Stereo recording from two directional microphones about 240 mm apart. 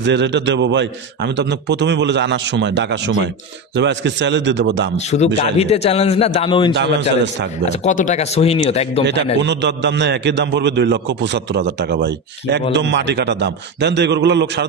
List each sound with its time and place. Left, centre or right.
0.0 s a man's voice: right
4.9 s a man's voice: left
7.8 s a man's voice: left
9.4 s a man's voice: right